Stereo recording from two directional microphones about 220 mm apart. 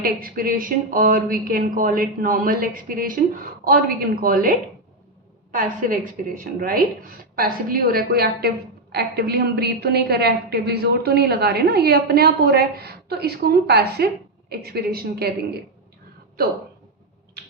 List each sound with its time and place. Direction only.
0.0 s a woman's voice: 40° right (ahead or behind)